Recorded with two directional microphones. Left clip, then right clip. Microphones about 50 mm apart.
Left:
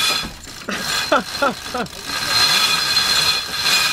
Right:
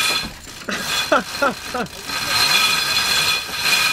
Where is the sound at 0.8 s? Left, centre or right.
Centre.